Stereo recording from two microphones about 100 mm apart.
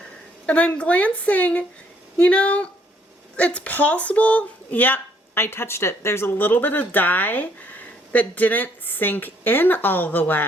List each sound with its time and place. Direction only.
0.4 s a woman's voice: 15° left (ahead or behind)